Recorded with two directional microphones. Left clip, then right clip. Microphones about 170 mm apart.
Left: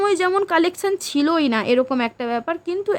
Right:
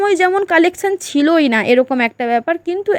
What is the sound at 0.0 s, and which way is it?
Speech, 20° right (ahead or behind).